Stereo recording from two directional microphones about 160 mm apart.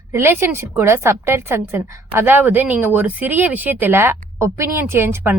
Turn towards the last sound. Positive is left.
turn(degrees=-15)  # may be behind; listen again after turning